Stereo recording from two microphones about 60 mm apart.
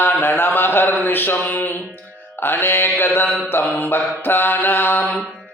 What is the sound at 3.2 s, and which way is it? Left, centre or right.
Music, centre.